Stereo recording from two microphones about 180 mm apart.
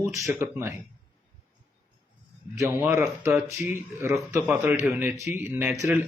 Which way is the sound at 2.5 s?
15° right (ahead or behind).